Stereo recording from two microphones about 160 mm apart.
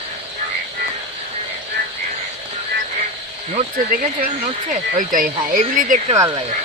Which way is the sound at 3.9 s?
65° right (ahead or behind).